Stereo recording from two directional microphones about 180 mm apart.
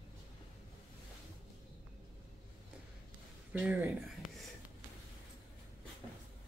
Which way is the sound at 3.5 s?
10° right (ahead or behind).